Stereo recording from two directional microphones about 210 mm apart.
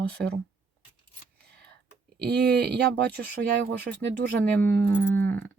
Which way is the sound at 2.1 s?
50° right (ahead or behind).